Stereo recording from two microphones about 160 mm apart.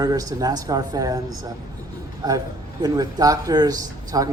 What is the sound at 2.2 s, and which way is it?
A man's voice, 25° right (ahead or behind).